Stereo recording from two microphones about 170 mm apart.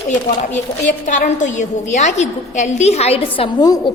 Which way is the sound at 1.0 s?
50° left (ahead or behind).